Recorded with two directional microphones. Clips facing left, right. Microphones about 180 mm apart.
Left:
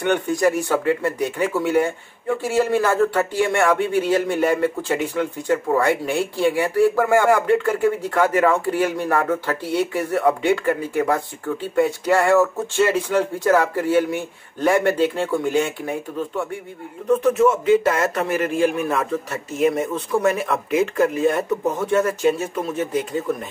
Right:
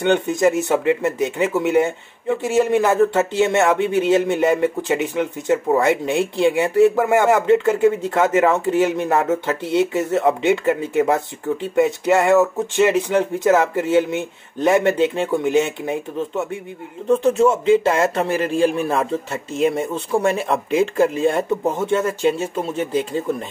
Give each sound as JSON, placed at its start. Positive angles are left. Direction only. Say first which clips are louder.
{"t": 0.0, "sound": "speech", "louder": "right 2 dB", "side_deg": -25}